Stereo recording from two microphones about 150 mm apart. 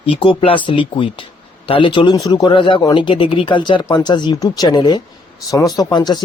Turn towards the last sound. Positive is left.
turn(degrees=30)  # may be behind; listen again after turning